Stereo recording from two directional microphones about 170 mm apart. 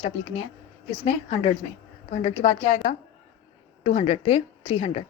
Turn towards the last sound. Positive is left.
turn(degrees=35)  # may be behind; listen again after turning